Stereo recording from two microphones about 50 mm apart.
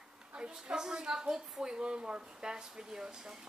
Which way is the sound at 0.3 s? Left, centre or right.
Centre.